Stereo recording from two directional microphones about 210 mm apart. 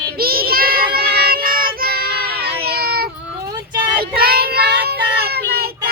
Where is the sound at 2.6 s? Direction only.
45° right (ahead or behind).